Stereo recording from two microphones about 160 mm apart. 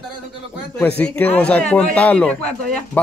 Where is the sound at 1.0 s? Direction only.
10° left (ahead or behind).